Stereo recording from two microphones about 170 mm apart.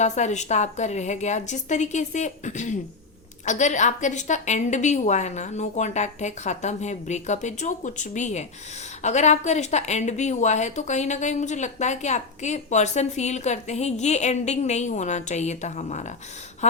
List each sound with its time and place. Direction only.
0.0 s speech: 45° left (ahead or behind)